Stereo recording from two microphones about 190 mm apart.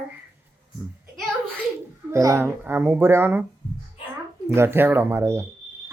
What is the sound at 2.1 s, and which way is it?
Speech, 15° right (ahead or behind).